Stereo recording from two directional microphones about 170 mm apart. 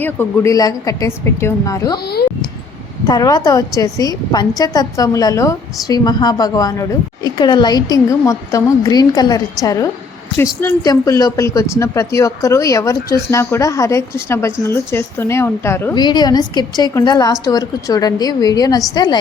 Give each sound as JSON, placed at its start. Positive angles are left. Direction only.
{"t": 0.0, "sound": "a woman's voice", "side_deg": 10}
{"t": 3.1, "sound": "a woman's voice", "side_deg": 25}
{"t": 16.0, "sound": "a woman's voice", "side_deg": 25}